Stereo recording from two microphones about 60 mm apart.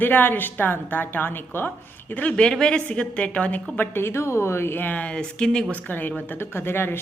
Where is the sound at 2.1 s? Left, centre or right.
Left.